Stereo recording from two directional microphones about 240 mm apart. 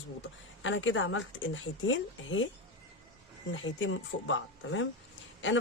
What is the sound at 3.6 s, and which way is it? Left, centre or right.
Speech, left.